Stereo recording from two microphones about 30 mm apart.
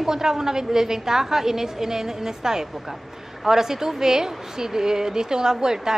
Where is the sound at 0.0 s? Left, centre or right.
Centre.